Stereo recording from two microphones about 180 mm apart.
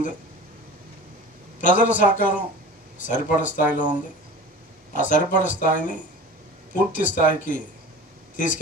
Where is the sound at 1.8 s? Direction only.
45° left (ahead or behind).